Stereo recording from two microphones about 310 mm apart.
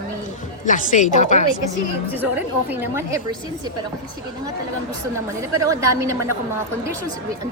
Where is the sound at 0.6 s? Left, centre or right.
Left.